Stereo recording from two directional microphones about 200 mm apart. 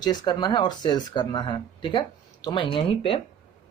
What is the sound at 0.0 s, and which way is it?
Speech, 20° left (ahead or behind).